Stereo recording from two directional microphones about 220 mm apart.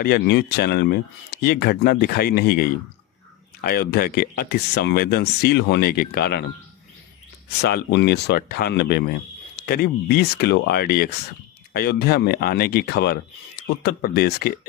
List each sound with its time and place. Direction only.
0.0 s speech: 45° left (ahead or behind)
7.6 s speech: 45° left (ahead or behind)